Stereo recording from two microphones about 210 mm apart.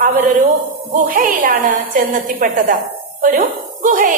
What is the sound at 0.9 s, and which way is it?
A woman's voice, 40° right (ahead or behind).